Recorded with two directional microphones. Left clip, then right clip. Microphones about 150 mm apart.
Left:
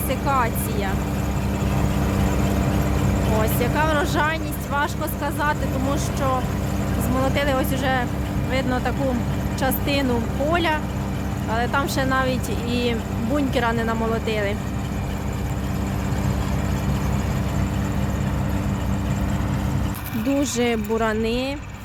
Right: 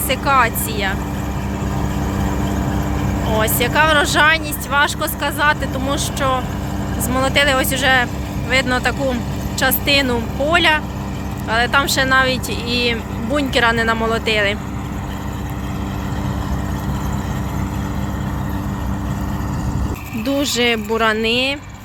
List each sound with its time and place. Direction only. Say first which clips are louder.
0.1 s speech: right 7 dB; centre (ahead or behind)
1.8 s vehicle: right 2 dB; 20° left (ahead or behind)
3.4 s speech: right 9 dB; centre (ahead or behind); by 13.4 s 15° left (ahead or behind)
13.5 s speech: right 11 dB; 5° left (ahead or behind)
20.2 s speech: right 5 dB; 15° left (ahead or behind)